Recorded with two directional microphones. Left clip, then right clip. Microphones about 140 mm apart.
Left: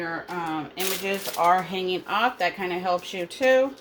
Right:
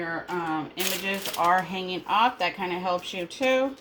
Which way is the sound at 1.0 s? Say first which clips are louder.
Left 3 dB; 45° left (ahead or behind).